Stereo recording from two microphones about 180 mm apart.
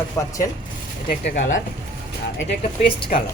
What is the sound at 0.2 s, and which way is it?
Speech, 15° left (ahead or behind).